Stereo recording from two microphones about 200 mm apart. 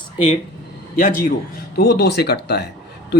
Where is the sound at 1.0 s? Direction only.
40° left (ahead or behind).